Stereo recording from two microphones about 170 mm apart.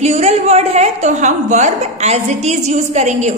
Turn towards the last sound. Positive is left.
turn(degrees=-40)  # may be behind; listen again after turning